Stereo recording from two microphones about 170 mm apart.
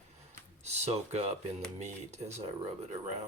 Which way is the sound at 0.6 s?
40° right (ahead or behind).